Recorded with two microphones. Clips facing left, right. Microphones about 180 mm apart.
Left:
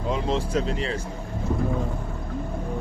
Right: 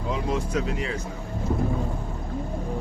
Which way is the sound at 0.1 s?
30° left (ahead or behind).